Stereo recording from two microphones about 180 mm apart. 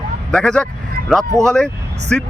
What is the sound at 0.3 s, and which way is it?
Speech, 5° left (ahead or behind).